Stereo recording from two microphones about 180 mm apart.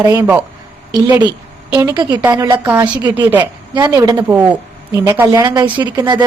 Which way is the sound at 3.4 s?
25° right (ahead or behind).